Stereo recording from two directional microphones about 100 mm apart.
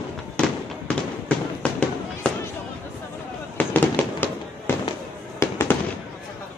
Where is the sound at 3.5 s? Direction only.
20° left (ahead or behind).